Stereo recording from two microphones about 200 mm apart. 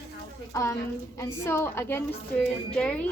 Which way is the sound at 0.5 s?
15° left (ahead or behind).